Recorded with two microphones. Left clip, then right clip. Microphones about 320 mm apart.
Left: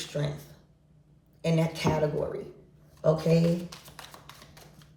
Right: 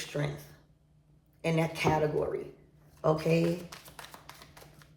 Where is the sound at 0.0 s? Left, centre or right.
Centre.